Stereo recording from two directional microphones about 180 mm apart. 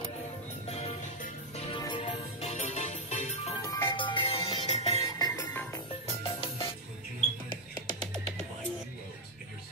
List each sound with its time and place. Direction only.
0.7 s music: 35° left (ahead or behind)
1.8 s music: 25° left (ahead or behind)
3.6 s music: 25° left (ahead or behind)
5.0 s music: 20° left (ahead or behind)
6.0 s music: 30° left (ahead or behind)